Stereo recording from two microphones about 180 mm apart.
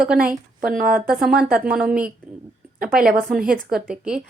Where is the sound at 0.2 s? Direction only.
50° right (ahead or behind).